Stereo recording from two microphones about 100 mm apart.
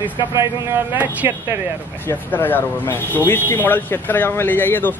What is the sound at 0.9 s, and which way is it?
Speech, 15° right (ahead or behind).